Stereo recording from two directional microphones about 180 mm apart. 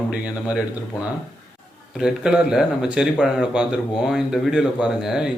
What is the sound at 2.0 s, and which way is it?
Speech, 5° right (ahead or behind).